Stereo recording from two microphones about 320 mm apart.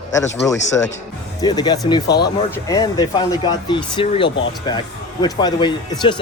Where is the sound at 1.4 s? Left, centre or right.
Centre.